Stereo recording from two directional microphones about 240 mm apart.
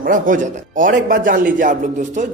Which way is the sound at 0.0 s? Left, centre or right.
Right.